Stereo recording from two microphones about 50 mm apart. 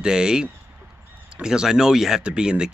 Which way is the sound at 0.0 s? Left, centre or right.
Centre.